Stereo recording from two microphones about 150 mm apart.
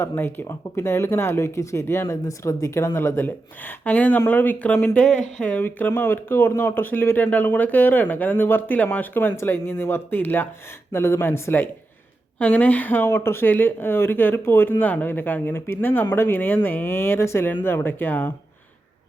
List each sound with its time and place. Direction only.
0.0 s speech: 15° left (ahead or behind)